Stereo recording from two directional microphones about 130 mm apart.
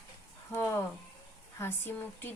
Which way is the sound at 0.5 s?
20° left (ahead or behind).